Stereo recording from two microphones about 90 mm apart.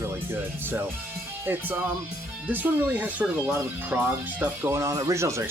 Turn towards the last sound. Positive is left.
turn(degrees=-35)  # may be behind; listen again after turning